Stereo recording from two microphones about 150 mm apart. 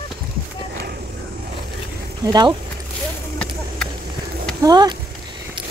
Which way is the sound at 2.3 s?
30° right (ahead or behind).